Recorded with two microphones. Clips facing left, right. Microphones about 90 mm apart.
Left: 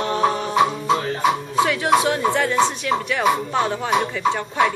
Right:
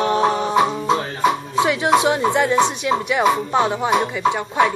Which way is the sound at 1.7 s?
20° right (ahead or behind).